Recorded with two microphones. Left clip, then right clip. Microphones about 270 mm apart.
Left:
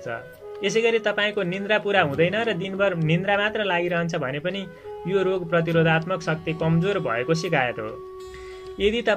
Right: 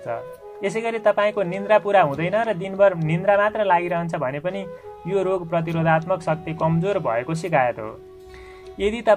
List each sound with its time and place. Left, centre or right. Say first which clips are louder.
0.0 s speech: right 3 dB; right